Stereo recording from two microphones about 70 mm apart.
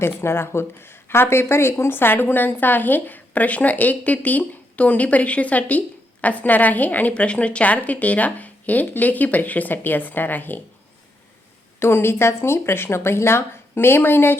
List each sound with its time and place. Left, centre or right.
0.0 s speech: left
11.8 s speech: left